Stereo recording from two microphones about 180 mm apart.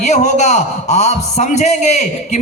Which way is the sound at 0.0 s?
40° left (ahead or behind).